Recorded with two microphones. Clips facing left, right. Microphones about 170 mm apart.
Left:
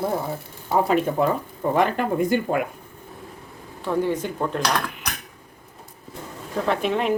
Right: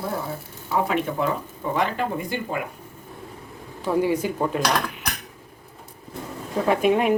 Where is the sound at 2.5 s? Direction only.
50° left (ahead or behind).